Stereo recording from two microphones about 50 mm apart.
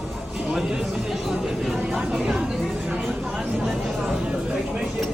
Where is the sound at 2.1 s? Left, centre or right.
Centre.